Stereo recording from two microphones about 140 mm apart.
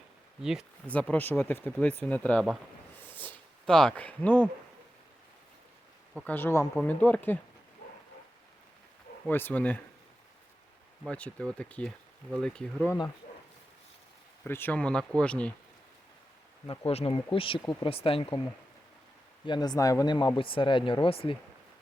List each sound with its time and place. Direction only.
0.9 s speech: 10° left (ahead or behind)
3.0 s a sound: 10° left (ahead or behind)
6.1 s speech: 10° left (ahead or behind)
9.3 s speech: 15° left (ahead or behind)
11.0 s speech: 10° left (ahead or behind)
14.4 s speech: 15° left (ahead or behind)
16.6 s speech: 45° left (ahead or behind)
19.5 s speech: 30° left (ahead or behind)